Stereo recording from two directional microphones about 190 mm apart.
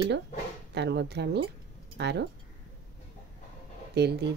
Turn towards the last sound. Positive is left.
turn(degrees=-60)  # may be behind; listen again after turning